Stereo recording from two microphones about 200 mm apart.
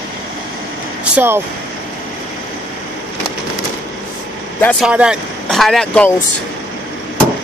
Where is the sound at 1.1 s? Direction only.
10° right (ahead or behind).